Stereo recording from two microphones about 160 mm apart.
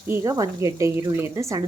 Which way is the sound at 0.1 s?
20° right (ahead or behind).